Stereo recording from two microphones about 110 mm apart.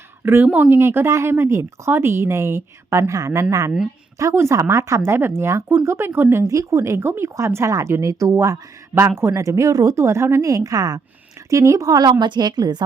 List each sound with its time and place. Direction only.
0.2 s speech: 20° right (ahead or behind); by 12.8 s 40° right (ahead or behind)